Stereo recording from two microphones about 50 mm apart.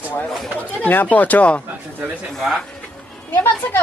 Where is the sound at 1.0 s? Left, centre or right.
Left.